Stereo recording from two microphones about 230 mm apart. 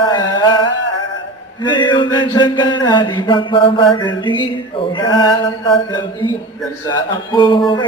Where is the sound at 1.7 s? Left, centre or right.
Left.